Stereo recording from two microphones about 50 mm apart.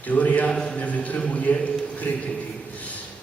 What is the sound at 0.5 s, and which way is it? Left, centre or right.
Speech, centre.